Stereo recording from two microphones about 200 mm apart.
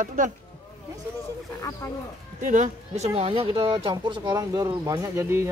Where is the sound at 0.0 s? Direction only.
40° right (ahead or behind).